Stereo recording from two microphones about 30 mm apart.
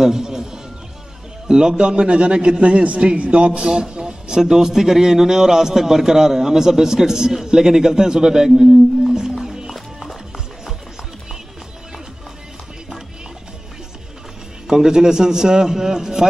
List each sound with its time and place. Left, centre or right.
0.0 s a sound: centre
1.5 s a man's voice: right
9.8 s music: centre
14.7 s a man's voice: centre